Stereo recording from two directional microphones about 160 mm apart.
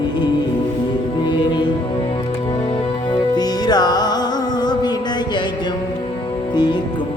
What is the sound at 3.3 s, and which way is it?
Music, 25° left (ahead or behind).